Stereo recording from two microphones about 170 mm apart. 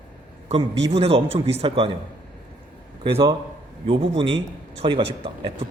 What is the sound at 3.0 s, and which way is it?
A man's voice, 30° right (ahead or behind).